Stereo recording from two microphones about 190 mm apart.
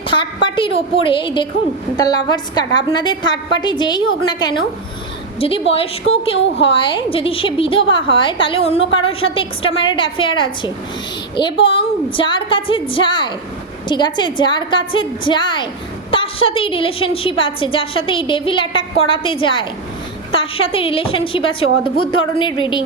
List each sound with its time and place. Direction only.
0.1 s a woman's voice: 25° left (ahead or behind)